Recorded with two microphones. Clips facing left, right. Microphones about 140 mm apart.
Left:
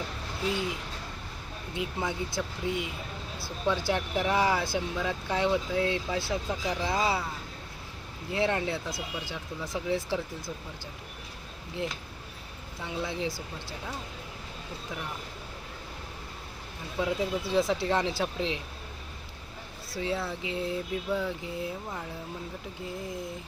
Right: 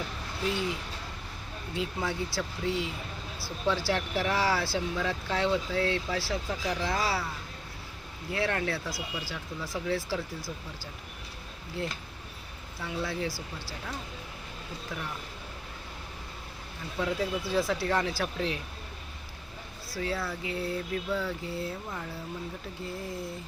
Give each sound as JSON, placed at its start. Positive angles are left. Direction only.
{"t": 1.7, "sound": "speech", "side_deg": 20}
{"t": 8.3, "sound": "speech", "side_deg": 20}
{"t": 12.8, "sound": "speech", "side_deg": 20}
{"t": 17.0, "sound": "speech", "side_deg": 15}
{"t": 20.0, "sound": "speech", "side_deg": 25}